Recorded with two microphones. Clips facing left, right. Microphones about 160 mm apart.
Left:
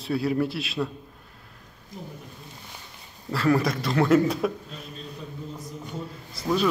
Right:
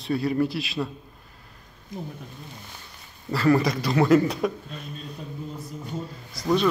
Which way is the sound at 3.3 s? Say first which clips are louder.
Right 2 dB; centre (ahead or behind).